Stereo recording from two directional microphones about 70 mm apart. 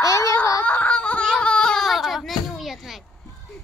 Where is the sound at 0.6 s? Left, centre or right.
Left.